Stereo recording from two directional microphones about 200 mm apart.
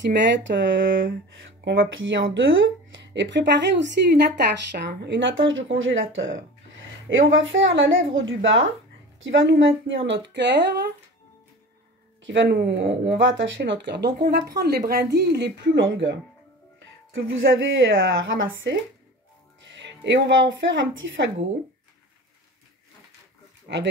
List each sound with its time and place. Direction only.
0.0 s speech: 60° right (ahead or behind)
12.2 s speech: 60° right (ahead or behind)
23.7 s speech: 50° right (ahead or behind)